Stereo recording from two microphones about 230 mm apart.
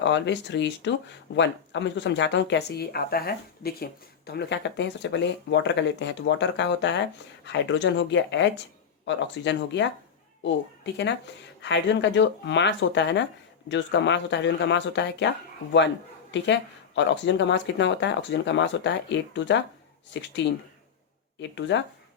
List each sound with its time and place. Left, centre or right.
0.0 s speech: left
16.3 s speech: left
21.5 s speech: left